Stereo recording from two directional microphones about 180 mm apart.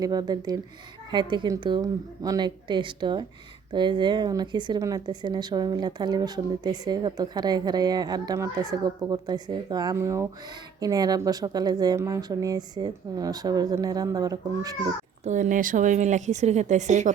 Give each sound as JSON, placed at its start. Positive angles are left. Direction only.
{"t": 0.0, "sound": "a woman's voice", "side_deg": -20}
{"t": 15.2, "sound": "a woman's voice", "side_deg": -45}